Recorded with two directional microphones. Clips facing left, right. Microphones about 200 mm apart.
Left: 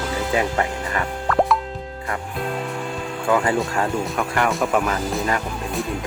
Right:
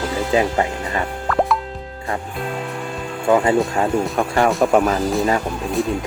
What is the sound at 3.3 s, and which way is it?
Speech, 20° right (ahead or behind).